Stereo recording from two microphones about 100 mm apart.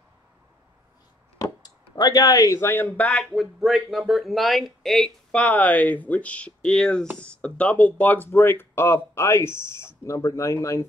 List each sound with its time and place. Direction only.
2.0 s speech: 40° left (ahead or behind); by 3.3 s 15° left (ahead or behind)
3.3 s speech: centre (ahead or behind); by 10.9 s 30° left (ahead or behind)